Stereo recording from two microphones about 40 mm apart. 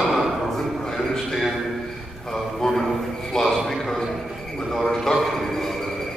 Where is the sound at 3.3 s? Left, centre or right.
Centre.